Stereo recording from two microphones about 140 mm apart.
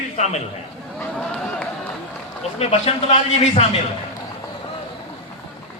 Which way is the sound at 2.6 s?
50° left (ahead or behind).